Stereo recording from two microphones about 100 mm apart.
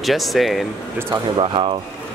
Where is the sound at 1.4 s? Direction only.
60° right (ahead or behind).